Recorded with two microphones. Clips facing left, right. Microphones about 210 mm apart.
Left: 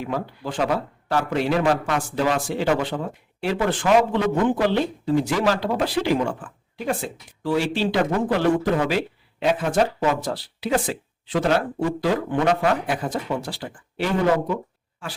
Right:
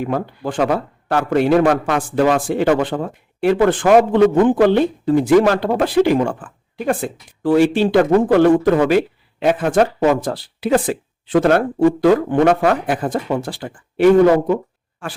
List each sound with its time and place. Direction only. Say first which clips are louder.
0.0 s speech: right 6 dB; 55° right (ahead or behind)